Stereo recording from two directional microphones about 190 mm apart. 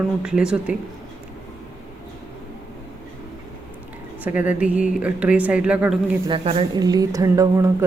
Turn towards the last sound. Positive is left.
turn(degrees=-15)  # may be behind; listen again after turning